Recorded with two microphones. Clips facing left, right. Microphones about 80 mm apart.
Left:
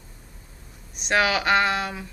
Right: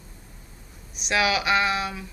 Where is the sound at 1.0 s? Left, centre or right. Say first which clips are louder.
Left 2 dB; left.